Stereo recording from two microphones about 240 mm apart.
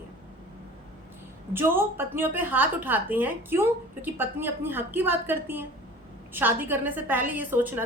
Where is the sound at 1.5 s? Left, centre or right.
Centre.